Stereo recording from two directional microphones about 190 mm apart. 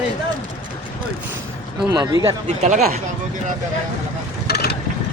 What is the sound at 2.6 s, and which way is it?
Speech, 35° right (ahead or behind).